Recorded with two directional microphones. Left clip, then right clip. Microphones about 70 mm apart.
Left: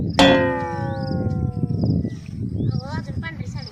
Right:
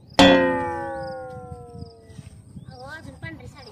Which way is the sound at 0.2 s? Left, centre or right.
Centre.